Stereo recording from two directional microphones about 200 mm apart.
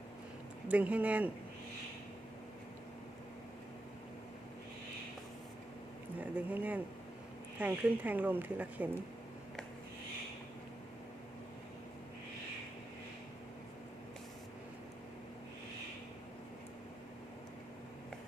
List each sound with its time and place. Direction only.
0.7 s speech: 5° right (ahead or behind)
6.1 s speech: 10° right (ahead or behind)